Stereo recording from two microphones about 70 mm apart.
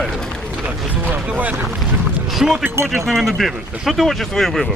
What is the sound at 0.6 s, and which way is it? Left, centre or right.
Speech, right.